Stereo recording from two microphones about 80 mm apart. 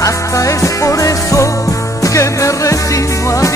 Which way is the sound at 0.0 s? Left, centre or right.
Left.